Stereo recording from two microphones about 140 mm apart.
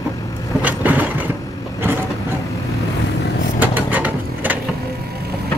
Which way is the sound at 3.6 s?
10° right (ahead or behind).